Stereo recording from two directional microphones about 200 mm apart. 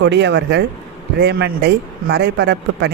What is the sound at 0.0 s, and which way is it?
A man's voice, 60° right (ahead or behind).